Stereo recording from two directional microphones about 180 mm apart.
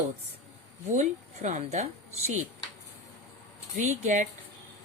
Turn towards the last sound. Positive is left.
turn(degrees=-45)  # may be behind; listen again after turning